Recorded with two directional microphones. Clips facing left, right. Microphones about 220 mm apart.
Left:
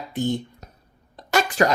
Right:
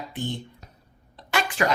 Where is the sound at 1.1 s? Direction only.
45° left (ahead or behind).